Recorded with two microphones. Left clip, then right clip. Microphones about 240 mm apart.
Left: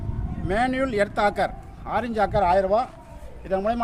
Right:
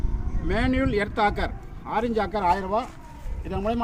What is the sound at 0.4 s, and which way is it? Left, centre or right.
Speech, left.